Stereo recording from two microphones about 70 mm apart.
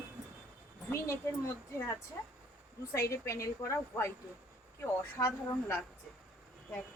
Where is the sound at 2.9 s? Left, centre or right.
Left.